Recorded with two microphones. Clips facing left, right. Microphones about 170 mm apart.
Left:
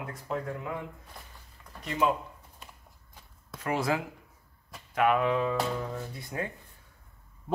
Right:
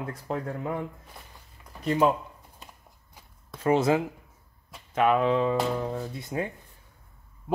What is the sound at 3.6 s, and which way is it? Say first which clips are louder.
Speech: right 7 dB; 25° right (ahead or behind).